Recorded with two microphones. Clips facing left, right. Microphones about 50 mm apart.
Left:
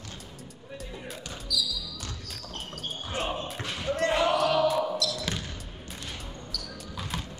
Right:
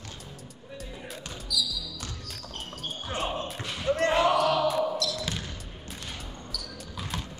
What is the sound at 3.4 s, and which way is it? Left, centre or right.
Basketball bounce, centre.